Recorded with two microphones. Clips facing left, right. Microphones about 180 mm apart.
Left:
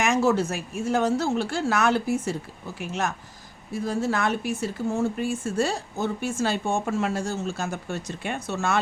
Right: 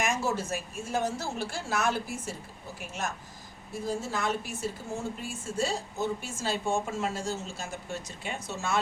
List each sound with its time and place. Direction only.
0.0 s speech: 65° left (ahead or behind)
3.8 s speech: 70° left (ahead or behind)